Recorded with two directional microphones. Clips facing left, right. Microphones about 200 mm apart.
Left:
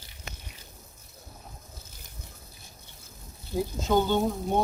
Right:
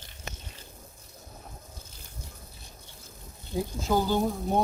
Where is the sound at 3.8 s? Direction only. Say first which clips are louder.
Left 1 dB; centre (ahead or behind).